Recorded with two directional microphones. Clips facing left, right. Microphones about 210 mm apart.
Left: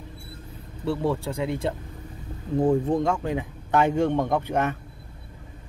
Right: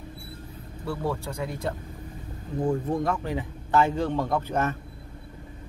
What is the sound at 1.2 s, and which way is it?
Speech, 25° left (ahead or behind).